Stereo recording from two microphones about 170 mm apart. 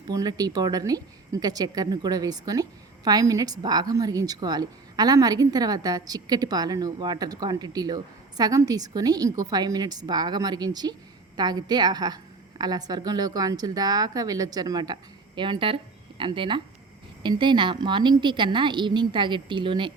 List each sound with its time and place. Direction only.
0.1 s a woman's voice: 20° right (ahead or behind)